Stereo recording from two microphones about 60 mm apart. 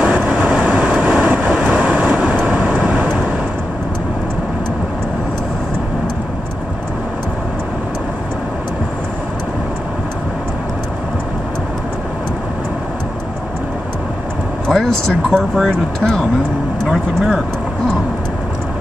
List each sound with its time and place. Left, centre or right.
0.0 s vehicle: right
14.7 s vehicle: centre
15.3 s speech: centre